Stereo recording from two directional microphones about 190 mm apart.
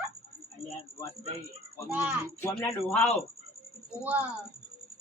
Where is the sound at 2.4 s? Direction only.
10° left (ahead or behind).